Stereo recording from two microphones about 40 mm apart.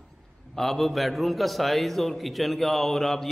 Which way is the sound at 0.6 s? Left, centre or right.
Centre.